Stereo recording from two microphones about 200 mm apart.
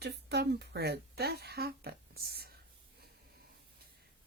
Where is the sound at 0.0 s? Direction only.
55° right (ahead or behind).